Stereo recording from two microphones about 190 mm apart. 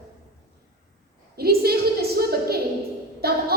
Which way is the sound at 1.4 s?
55° right (ahead or behind).